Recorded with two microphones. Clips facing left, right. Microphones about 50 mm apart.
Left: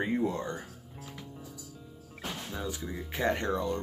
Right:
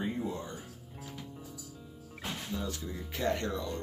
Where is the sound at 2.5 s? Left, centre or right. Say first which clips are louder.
Left 2 dB; centre.